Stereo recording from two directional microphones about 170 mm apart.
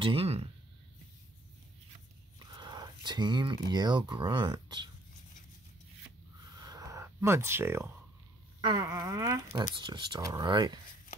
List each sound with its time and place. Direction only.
0.0 s speech: 35° right (ahead or behind)
2.3 s speech: 25° right (ahead or behind)
6.5 s a sound: 20° right (ahead or behind)
8.5 s a sound: 30° right (ahead or behind)
8.8 s speech: 20° right (ahead or behind)
9.8 s speech: 30° right (ahead or behind)